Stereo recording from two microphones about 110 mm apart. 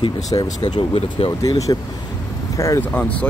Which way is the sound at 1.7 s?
35° left (ahead or behind).